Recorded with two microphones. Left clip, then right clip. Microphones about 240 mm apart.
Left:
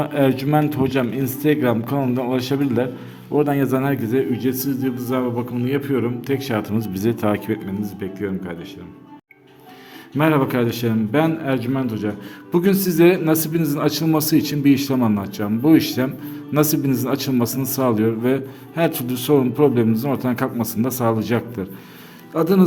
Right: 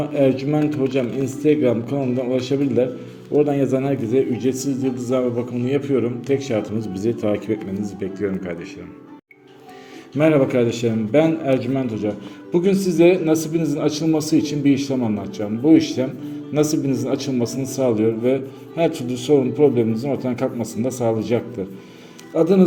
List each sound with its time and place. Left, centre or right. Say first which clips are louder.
0.0 s a man's voice: right 1 dB; left
10.2 s a man's voice: right 2 dB; centre
15.6 s a man's voice: right 1 dB; left
16.6 s a man's voice: even; left